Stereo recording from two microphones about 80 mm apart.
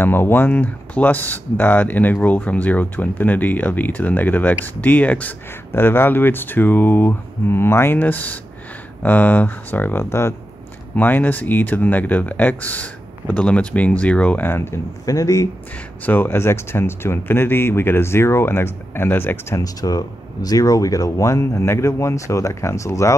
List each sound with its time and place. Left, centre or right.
0.0 s speech: left
11.0 s speech: left
14.4 s speech: left
15.0 s speech: left
16.1 s speech: left
19.5 s speech: left